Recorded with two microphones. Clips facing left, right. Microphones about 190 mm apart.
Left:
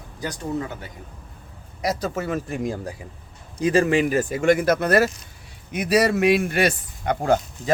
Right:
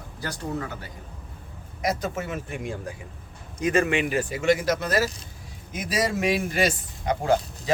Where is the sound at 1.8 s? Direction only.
35° left (ahead or behind).